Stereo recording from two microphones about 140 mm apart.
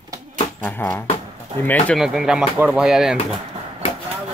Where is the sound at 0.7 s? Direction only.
10° left (ahead or behind).